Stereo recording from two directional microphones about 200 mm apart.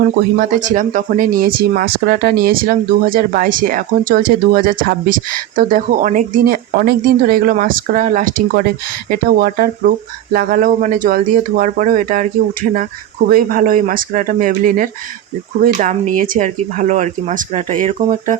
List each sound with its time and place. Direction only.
0.0 s speech: 45° right (ahead or behind)